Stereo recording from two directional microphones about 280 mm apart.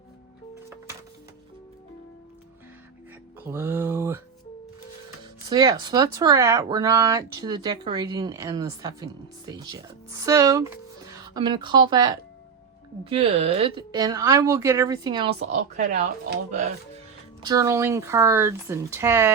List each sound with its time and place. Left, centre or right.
3.4 s a sound: centre
5.5 s speech: centre
17.4 s speech: centre